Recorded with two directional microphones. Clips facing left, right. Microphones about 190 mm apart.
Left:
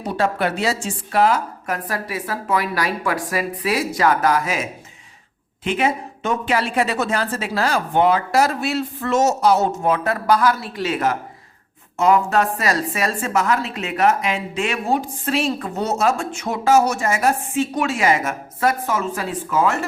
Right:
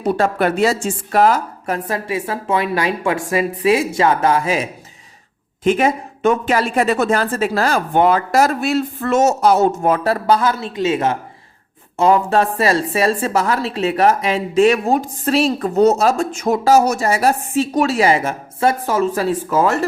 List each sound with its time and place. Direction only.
0.2 s speech: 50° right (ahead or behind)
1.6 s a woman's voice: 25° right (ahead or behind)
5.6 s speech: 45° right (ahead or behind)
10.0 s a woman's voice: 30° right (ahead or behind)